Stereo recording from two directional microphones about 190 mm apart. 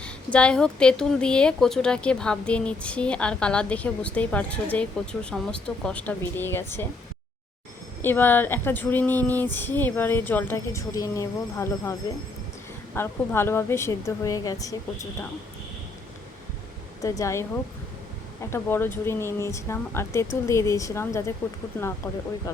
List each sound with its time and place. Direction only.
0.0 s speech: 5° left (ahead or behind)
8.0 s speech: 10° left (ahead or behind)
17.0 s speech: 15° left (ahead or behind)
18.5 s speech: 10° left (ahead or behind)
22.5 s speech: 15° left (ahead or behind)